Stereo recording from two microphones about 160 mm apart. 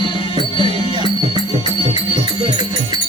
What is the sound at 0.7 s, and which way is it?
Music, 30° right (ahead or behind).